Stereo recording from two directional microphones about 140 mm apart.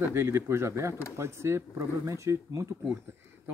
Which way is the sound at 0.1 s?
20° right (ahead or behind).